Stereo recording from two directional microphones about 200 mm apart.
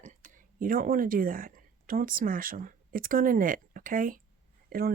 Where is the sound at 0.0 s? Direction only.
40° right (ahead or behind).